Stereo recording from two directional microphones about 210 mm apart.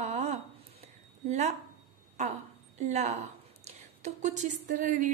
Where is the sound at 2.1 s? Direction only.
35° right (ahead or behind).